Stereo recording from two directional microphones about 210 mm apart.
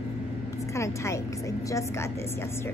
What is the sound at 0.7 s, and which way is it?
Vehicle, 15° left (ahead or behind).